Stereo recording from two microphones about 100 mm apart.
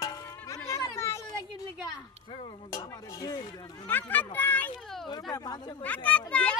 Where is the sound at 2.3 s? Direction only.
65° left (ahead or behind).